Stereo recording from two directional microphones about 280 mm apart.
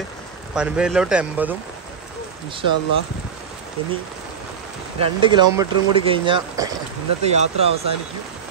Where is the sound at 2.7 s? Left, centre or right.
Left.